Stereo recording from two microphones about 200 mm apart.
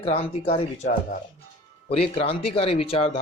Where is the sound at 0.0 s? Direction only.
30° left (ahead or behind).